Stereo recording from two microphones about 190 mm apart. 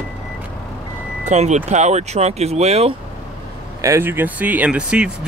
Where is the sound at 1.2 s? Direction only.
35° right (ahead or behind).